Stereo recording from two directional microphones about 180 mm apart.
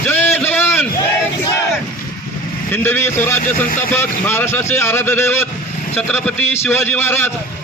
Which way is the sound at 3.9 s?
10° left (ahead or behind).